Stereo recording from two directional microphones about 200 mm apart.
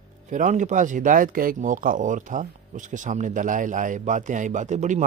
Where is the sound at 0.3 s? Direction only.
40° right (ahead or behind).